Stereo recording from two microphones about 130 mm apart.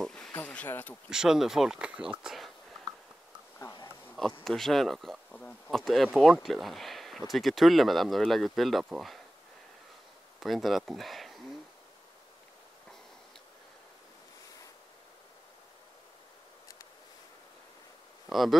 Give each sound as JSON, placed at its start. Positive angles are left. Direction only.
{"t": 0.0, "sound": "a sound", "side_deg": 5}
{"t": 1.1, "sound": "speech", "side_deg": -5}
{"t": 4.5, "sound": "speech", "side_deg": 0}
{"t": 10.4, "sound": "speech", "side_deg": 0}
{"t": 18.3, "sound": "speech", "side_deg": 0}